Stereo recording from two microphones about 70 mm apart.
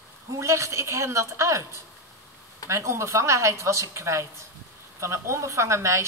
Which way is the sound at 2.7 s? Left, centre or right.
Right.